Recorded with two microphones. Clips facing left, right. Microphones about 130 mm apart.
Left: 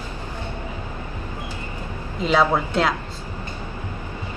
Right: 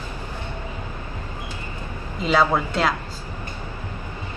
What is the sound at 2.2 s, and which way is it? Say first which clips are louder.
Speech: left 1 dB; centre (ahead or behind).